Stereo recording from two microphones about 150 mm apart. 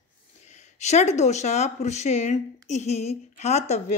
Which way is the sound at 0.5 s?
50° left (ahead or behind).